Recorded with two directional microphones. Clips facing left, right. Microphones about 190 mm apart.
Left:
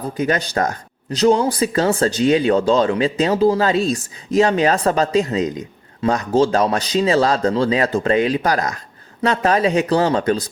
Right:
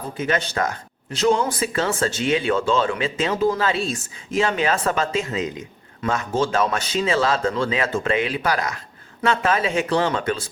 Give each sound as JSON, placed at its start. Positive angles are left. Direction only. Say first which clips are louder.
{"t": 0.2, "sound": "speech", "louder": "left 3 dB", "side_deg": 35}